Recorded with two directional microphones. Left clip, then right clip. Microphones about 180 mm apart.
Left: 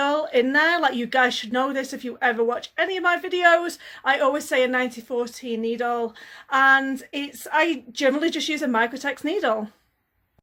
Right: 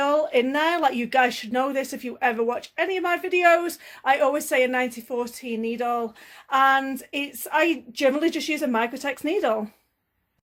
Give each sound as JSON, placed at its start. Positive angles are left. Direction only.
{"t": 0.0, "sound": "speech", "side_deg": -10}